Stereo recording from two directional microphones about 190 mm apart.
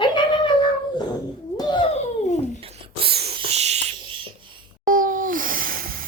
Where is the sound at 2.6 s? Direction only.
30° right (ahead or behind).